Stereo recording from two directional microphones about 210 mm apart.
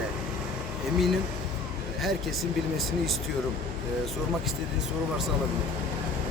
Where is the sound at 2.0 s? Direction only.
Centre (ahead or behind).